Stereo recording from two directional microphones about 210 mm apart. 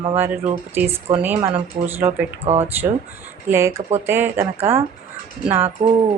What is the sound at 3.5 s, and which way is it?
Speech, 15° right (ahead or behind).